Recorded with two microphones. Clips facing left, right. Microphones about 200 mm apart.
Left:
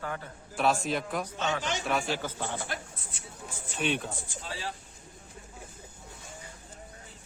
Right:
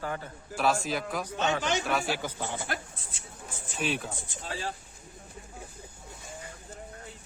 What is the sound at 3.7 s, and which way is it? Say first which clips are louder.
Speech: left 1 dB; centre (ahead or behind).